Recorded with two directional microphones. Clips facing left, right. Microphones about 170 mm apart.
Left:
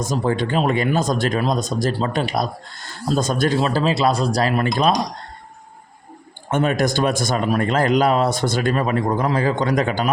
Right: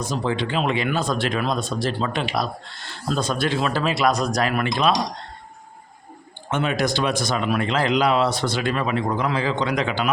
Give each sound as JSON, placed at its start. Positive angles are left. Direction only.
{"t": 0.0, "sound": "speech", "side_deg": 45}
{"t": 3.6, "sound": "speech", "side_deg": 35}
{"t": 6.5, "sound": "speech", "side_deg": 45}